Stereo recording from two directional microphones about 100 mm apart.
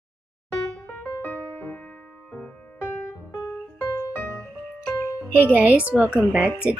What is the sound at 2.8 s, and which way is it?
Music, 20° left (ahead or behind).